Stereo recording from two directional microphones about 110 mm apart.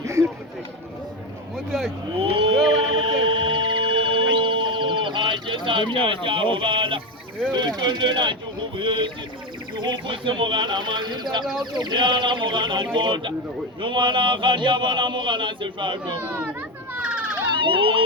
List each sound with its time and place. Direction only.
0.0 s chatter: 25° right (ahead or behind)
1.5 s a sound: centre (ahead or behind)
2.3 s music: 50° right (ahead or behind)
7.5 s a man's voice: 40° right (ahead or behind)
16.2 s children playing: 15° right (ahead or behind)
17.6 s a man's voice: 50° right (ahead or behind)